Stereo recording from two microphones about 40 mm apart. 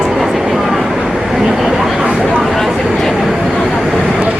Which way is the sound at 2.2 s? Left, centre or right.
Centre.